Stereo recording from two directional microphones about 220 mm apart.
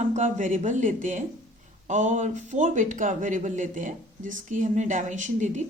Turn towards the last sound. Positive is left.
turn(degrees=-35)  # may be behind; listen again after turning